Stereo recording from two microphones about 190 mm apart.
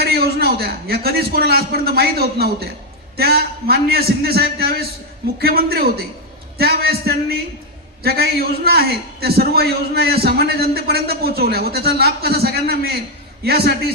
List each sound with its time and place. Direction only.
0.0 s a man's voice: 55° right (ahead or behind)